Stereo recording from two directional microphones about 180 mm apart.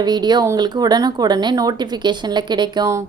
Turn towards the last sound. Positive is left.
turn(degrees=-20)  # may be behind; listen again after turning